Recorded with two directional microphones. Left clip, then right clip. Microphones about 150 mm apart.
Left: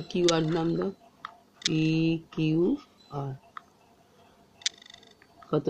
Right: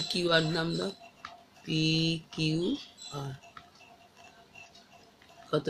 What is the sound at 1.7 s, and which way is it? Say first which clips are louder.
Speech: left 1 dB; 45° left (ahead or behind).